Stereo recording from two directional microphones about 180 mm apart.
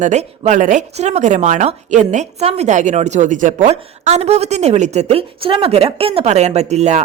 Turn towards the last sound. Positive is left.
turn(degrees=-40)  # may be behind; listen again after turning